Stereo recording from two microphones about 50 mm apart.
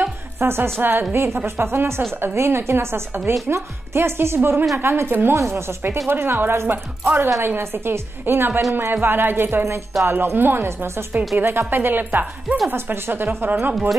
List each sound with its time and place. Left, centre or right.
0.4 s a woman's voice: right
0.7 s speech: right
1.1 s a woman's voice: right
5.3 s speech: right
6.0 s speech: right